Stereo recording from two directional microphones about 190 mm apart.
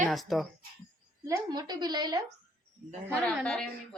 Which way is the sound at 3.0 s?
10° right (ahead or behind).